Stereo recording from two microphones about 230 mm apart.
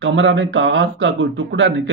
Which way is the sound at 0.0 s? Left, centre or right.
Right.